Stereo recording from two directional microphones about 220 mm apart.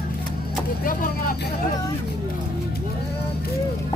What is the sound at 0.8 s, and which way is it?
Vehicle, 40° left (ahead or behind).